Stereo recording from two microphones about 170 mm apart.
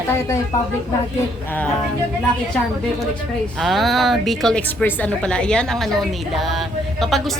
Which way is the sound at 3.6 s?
Centre (ahead or behind).